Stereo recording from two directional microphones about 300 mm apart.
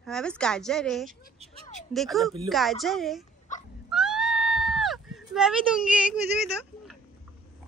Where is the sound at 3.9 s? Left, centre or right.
Centre.